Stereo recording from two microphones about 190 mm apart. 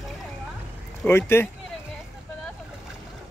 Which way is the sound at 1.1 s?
15° left (ahead or behind).